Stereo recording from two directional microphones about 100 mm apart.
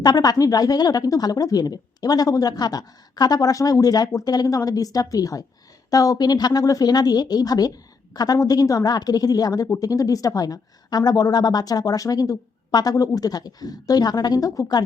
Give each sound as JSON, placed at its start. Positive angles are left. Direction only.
{"t": 0.0, "sound": "a woman's voice", "side_deg": 40}